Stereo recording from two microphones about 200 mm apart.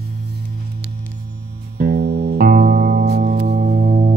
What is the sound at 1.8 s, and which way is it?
Music, 50° right (ahead or behind).